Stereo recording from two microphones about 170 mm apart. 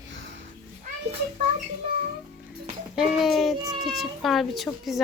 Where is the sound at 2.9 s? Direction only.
Centre (ahead or behind).